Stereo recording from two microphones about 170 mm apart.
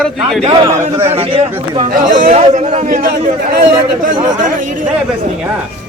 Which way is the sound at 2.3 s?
35° right (ahead or behind).